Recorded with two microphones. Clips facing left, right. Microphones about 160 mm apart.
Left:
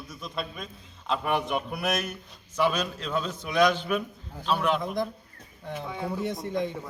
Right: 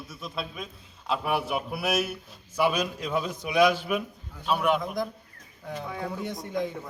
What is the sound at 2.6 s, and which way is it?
A man's voice, 10° right (ahead or behind).